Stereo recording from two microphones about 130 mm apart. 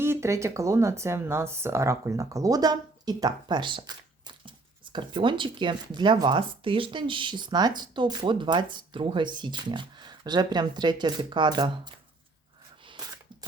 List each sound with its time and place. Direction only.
0.0 s speech: 20° right (ahead or behind)